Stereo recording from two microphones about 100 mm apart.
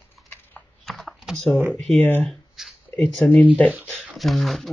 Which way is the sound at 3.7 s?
15° right (ahead or behind).